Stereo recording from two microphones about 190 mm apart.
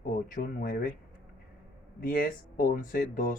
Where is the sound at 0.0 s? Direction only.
45° left (ahead or behind).